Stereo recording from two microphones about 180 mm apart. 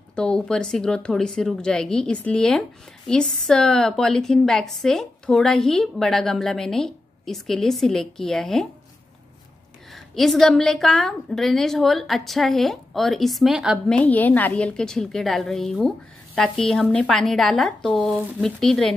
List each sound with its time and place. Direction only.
0.1 s a woman's voice: 5° left (ahead or behind)
9.9 s a woman's voice: centre (ahead or behind)
13.9 s a woman's voice: 10° left (ahead or behind)